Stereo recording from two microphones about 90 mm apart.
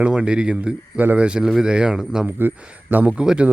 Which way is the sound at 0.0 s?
10° right (ahead or behind).